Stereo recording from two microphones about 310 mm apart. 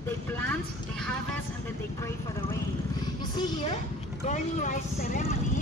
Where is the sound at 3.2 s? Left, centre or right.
Centre.